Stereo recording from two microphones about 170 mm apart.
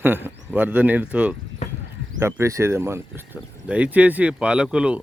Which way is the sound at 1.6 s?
40° left (ahead or behind).